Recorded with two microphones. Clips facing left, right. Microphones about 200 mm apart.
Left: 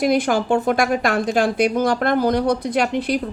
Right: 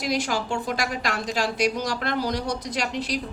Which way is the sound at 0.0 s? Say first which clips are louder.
Left 8 dB; 55° left (ahead or behind).